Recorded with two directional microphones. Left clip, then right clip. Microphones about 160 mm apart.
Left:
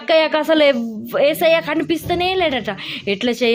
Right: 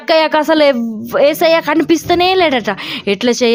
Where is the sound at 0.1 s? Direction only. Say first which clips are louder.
Right 4 dB; 40° right (ahead or behind).